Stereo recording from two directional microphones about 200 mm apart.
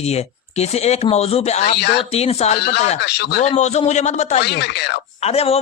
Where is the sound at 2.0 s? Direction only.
30° left (ahead or behind).